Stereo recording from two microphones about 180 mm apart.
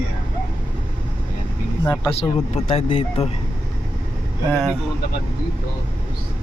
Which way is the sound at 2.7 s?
35° left (ahead or behind).